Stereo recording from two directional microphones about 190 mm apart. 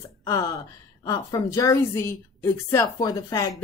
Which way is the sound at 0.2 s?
20° left (ahead or behind).